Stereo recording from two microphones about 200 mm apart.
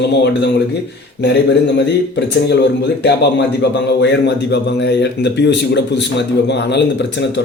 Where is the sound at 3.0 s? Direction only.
60° left (ahead or behind).